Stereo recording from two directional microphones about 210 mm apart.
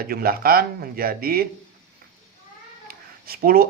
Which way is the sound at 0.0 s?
45° right (ahead or behind).